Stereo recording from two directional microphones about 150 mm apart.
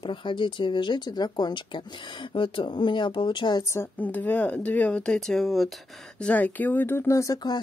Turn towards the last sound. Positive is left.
turn(degrees=25)  # may be behind; listen again after turning